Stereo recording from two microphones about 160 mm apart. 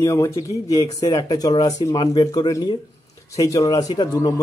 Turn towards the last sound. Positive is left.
turn(degrees=25)  # may be behind; listen again after turning